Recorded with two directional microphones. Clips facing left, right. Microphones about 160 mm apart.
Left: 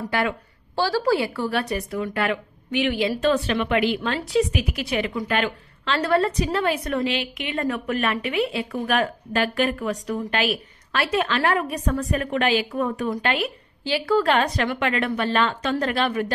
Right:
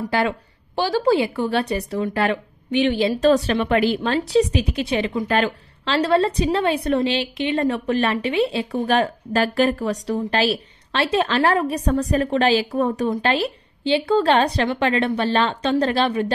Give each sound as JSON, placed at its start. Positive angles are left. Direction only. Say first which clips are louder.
{"t": 0.1, "sound": "a woman's voice", "louder": "right 3 dB", "side_deg": -30}
{"t": 0.7, "sound": "a woman's voice", "louder": "right 3 dB", "side_deg": -20}
{"t": 3.2, "sound": "a woman's voice", "louder": "right 4 dB", "side_deg": -40}